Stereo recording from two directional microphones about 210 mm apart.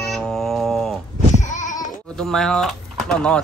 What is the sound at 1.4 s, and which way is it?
Sheep, 35° left (ahead or behind).